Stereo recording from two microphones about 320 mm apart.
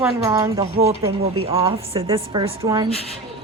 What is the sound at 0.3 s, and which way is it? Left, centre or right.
Speech, centre.